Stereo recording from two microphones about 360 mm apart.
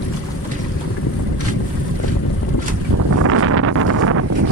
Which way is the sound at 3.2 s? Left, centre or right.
Right.